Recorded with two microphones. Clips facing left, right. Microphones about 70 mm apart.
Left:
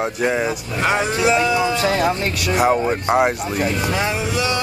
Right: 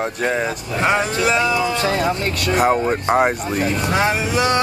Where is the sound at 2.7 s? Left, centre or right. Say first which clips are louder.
Even; centre.